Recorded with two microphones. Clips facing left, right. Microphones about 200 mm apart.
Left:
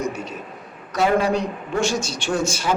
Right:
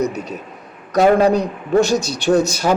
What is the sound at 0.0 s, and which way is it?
A man's voice, 40° right (ahead or behind).